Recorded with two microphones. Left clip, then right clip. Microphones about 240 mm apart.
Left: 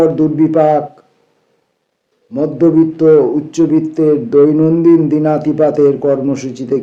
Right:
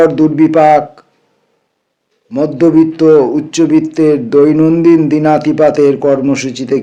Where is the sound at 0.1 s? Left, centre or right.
Right.